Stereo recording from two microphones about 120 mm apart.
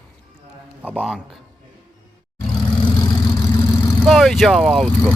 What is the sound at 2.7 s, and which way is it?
Vehicle, 40° left (ahead or behind).